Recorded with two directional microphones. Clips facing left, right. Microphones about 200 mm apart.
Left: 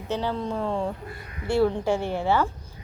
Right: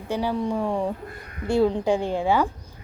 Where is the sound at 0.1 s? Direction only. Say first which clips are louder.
Right 3 dB; 10° right (ahead or behind).